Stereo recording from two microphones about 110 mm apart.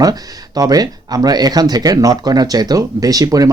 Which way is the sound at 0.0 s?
35° right (ahead or behind).